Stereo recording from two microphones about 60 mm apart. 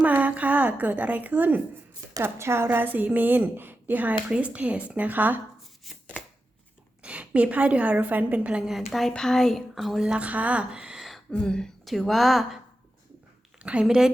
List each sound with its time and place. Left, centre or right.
0.0 s a woman's voice: right
2.2 s speech: right
2.6 s a woman's voice: right
4.3 s a woman's voice: right
7.0 s a woman's voice: right
8.6 s speech: centre
10.0 s speech: centre
11.3 s speech: centre
11.9 s speech: centre
13.6 s speech: centre
13.8 s a woman's voice: centre